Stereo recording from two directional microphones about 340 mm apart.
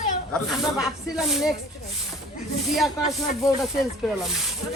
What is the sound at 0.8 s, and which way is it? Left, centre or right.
Speech, centre.